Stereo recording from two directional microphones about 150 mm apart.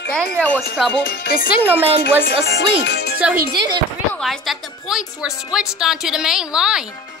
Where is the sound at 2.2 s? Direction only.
90° left.